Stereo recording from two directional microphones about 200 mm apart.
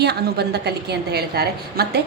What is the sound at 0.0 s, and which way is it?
A woman's voice, 55° right (ahead or behind).